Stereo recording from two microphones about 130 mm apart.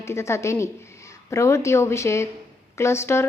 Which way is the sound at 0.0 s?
20° left (ahead or behind).